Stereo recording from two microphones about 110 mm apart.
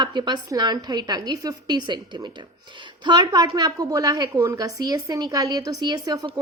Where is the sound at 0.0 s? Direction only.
45° right (ahead or behind).